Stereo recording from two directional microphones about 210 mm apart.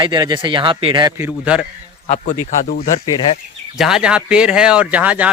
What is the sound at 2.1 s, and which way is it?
Speech, 35° left (ahead or behind).